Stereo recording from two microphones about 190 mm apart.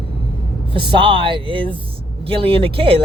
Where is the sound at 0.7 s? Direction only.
25° right (ahead or behind).